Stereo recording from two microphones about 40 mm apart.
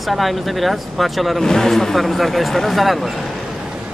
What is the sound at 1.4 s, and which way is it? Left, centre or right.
Speech, centre.